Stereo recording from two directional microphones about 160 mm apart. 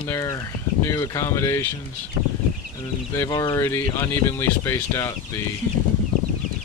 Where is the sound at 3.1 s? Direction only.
15° left (ahead or behind).